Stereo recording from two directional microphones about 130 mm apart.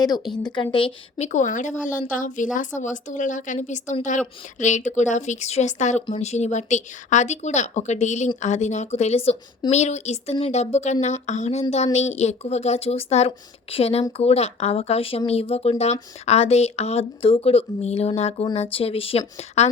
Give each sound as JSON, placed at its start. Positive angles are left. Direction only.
{"t": 0.0, "sound": "speech", "side_deg": 30}
{"t": 1.2, "sound": "a woman's voice", "side_deg": 65}